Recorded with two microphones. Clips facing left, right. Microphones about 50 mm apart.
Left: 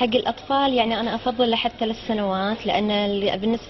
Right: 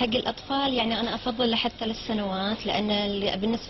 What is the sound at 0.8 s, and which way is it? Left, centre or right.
A woman's voice, centre.